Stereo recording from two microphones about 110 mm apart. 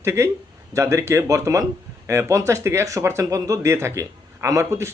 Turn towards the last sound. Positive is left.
turn(degrees=-25)  # may be behind; listen again after turning